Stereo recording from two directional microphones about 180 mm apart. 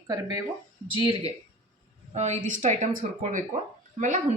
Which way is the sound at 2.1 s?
40° right (ahead or behind).